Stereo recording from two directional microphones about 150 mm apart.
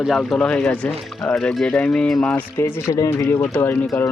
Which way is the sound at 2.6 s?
15° left (ahead or behind).